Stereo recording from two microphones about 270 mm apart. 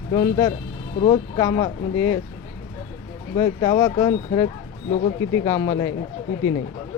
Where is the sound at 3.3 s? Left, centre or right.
Centre.